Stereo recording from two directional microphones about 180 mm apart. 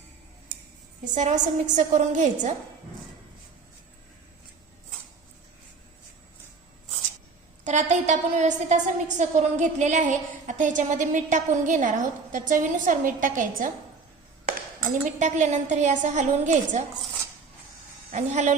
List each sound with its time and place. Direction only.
1.0 s a woman's voice: 40° right (ahead or behind)
7.6 s a woman's voice: 40° right (ahead or behind)
15.2 s a woman's voice: 40° right (ahead or behind)
18.1 s a woman's voice: 40° right (ahead or behind)